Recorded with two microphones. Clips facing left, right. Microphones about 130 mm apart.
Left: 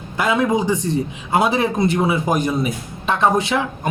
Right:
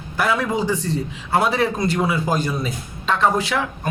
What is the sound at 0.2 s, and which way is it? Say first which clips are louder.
A man's voice: left 3 dB; 20° left (ahead or behind).